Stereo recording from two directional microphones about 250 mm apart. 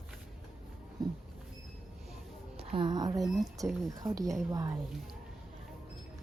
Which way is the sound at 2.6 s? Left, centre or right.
Centre.